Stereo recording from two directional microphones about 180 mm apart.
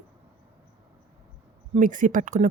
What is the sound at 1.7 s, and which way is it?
Speech, 45° right (ahead or behind).